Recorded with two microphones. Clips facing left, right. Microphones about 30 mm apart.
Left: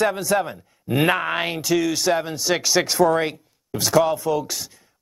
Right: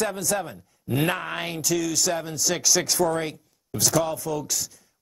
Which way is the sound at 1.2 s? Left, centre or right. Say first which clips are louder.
Left 6 dB; left.